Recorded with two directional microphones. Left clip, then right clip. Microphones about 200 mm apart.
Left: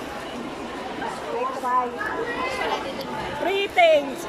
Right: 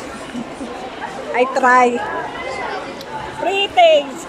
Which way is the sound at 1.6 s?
50° right (ahead or behind).